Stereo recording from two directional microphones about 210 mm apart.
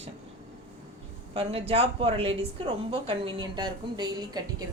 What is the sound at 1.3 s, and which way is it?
Speech, 25° right (ahead or behind).